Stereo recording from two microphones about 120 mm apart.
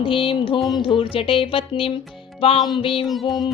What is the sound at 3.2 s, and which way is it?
Music, 35° left (ahead or behind).